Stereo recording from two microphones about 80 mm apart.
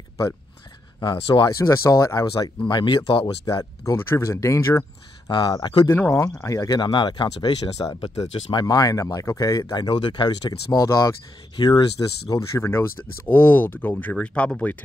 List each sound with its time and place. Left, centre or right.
1.0 s speech: left
1.6 s speech: left
2.7 s speech: left
3.5 s speech: left
3.8 s speech: left
5.3 s speech: left
5.9 s speech: left
6.7 s speech: left
8.5 s speech: left
9.8 s speech: left
11.5 s speech: left
13.3 s speech: left